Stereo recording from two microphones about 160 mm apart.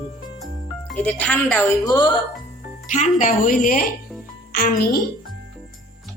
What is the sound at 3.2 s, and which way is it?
Speech, 60° left (ahead or behind).